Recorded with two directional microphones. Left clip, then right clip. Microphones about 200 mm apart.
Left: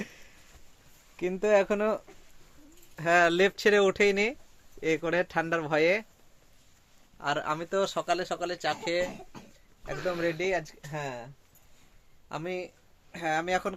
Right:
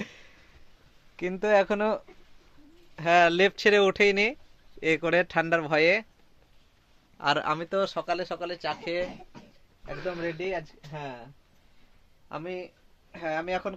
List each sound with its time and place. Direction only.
0.0 s a sound: 10° right (ahead or behind)
1.1 s speech: 10° right (ahead or behind)
7.2 s speech: 45° right (ahead or behind)
7.9 s speech: centre (ahead or behind)
9.8 s speech: 15° left (ahead or behind)
12.3 s speech: 5° left (ahead or behind)